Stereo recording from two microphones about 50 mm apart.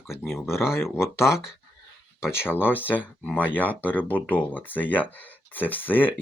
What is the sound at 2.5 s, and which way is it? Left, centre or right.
Speech, left.